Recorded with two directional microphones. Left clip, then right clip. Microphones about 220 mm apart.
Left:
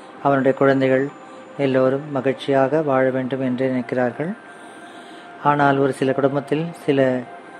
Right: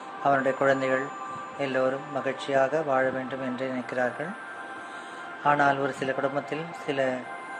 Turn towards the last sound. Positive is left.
turn(degrees=35)  # may be behind; listen again after turning